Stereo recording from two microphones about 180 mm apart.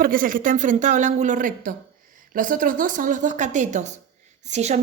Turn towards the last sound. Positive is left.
turn(degrees=-40)  # may be behind; listen again after turning